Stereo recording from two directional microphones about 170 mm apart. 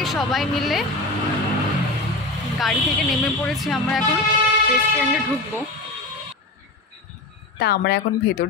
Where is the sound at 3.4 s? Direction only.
Centre (ahead or behind).